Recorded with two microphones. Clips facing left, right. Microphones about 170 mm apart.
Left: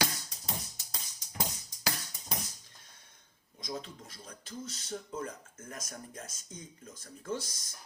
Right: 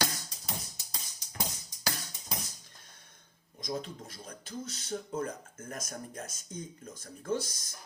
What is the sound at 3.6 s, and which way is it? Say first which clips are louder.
Speech: right 4 dB; 45° right (ahead or behind).